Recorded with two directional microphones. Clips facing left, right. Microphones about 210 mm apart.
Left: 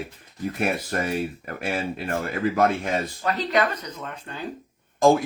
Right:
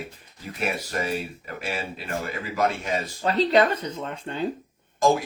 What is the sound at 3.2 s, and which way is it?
Speech, 30° right (ahead or behind).